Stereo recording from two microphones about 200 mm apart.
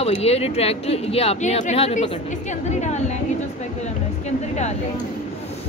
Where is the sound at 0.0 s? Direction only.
30° left (ahead or behind).